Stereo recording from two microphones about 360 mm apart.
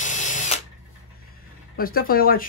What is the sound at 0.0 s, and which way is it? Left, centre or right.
Drill, centre.